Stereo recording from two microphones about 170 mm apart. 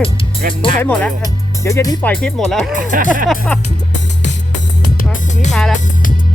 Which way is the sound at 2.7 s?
50° right (ahead or behind).